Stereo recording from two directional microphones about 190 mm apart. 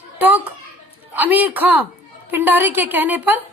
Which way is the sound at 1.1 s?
10° right (ahead or behind).